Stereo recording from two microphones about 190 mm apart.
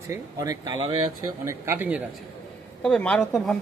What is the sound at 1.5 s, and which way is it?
Speech, 10° right (ahead or behind).